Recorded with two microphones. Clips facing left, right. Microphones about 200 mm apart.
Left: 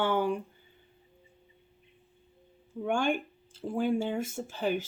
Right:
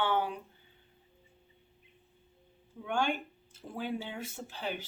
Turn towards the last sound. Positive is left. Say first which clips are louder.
# left 8 dB
turn(degrees=45)  # may be behind; listen again after turning